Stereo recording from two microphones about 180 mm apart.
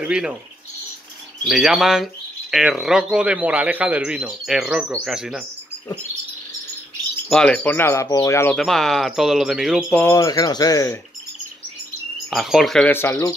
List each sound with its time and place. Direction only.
0.0 s speech: 5° right (ahead or behind)
1.4 s speech: centre (ahead or behind)
7.2 s speech: 5° left (ahead or behind)
8.5 s speech: centre (ahead or behind)
10.0 s speech: 20° left (ahead or behind)
12.3 s speech: centre (ahead or behind)